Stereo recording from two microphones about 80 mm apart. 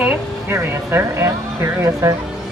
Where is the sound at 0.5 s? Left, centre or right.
Right.